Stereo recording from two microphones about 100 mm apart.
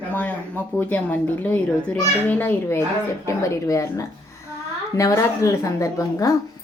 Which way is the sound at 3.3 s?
30° left (ahead or behind).